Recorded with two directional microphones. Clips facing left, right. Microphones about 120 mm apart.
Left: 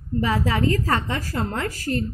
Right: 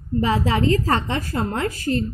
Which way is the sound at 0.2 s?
25° right (ahead or behind).